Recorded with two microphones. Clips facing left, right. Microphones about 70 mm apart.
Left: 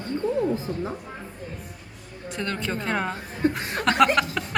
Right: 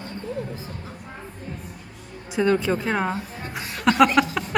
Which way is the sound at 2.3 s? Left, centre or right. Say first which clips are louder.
Right 8 dB; centre.